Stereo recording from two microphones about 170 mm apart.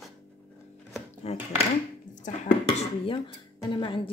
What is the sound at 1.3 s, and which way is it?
Speech, 35° left (ahead or behind).